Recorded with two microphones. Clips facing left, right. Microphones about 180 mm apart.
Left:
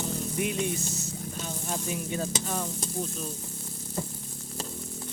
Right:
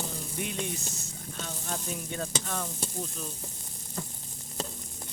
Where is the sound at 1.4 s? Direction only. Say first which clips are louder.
Left 3 dB; 10° left (ahead or behind).